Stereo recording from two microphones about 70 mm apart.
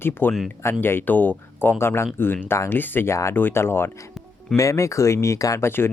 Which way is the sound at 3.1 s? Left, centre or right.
Left.